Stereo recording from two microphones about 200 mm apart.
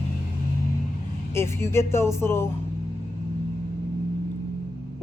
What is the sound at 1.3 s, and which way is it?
Speech, 10° left (ahead or behind).